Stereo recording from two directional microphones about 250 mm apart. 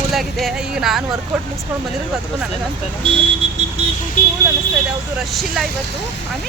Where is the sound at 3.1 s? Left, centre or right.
Right.